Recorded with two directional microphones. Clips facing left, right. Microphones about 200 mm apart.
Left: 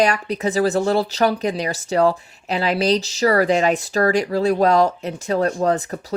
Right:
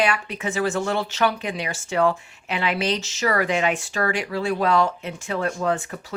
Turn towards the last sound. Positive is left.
turn(degrees=40)  # may be behind; listen again after turning